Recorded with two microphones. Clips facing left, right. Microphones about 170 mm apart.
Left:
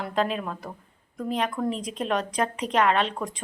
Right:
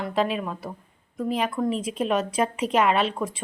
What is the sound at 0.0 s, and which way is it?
A woman's voice, 5° right (ahead or behind).